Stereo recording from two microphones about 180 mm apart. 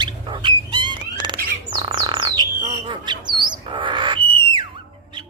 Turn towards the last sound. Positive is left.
turn(degrees=-25)  # may be behind; listen again after turning